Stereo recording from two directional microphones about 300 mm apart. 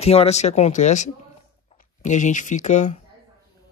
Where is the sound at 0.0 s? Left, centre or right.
Centre.